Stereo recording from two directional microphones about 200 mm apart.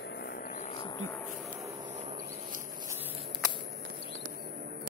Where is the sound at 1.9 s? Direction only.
35° right (ahead or behind).